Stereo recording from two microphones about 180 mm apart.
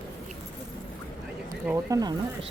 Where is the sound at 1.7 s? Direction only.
20° right (ahead or behind).